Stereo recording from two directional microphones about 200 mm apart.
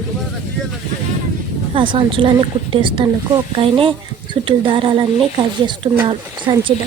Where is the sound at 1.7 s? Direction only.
25° right (ahead or behind).